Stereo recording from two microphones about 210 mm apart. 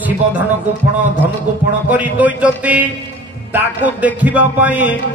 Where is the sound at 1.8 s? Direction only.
5° right (ahead or behind).